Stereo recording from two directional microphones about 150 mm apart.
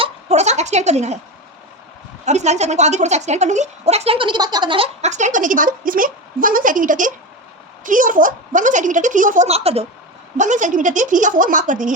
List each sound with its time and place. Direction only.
0.0 s a sound: 50° right (ahead or behind)
2.2 s speech: 50° right (ahead or behind); by 4.9 s 30° right (ahead or behind)
5.0 s a woman's voice: 55° right (ahead or behind)
9.5 s speech: 40° right (ahead or behind)
10.3 s a woman's voice: 55° right (ahead or behind)